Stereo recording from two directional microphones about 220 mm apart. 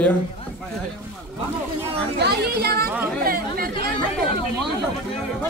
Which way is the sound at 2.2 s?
45° right (ahead or behind).